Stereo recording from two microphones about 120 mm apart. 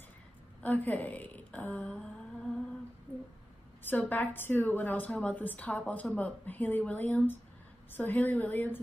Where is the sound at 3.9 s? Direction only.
15° left (ahead or behind).